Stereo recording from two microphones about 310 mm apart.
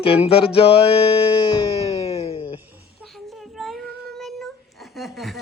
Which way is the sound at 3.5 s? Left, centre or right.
Centre.